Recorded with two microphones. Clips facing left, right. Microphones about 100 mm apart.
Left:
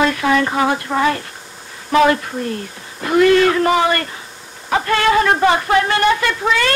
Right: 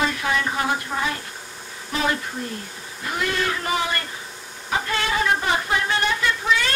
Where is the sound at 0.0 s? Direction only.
75° left (ahead or behind).